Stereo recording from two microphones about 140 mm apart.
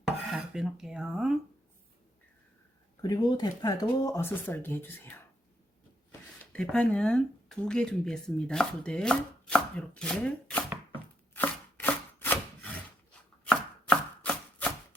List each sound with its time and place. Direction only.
0.3 s speech: 5° right (ahead or behind)
3.0 s speech: 30° left (ahead or behind); by 10.6 s 5° left (ahead or behind)
11.3 s chopping: 15° left (ahead or behind)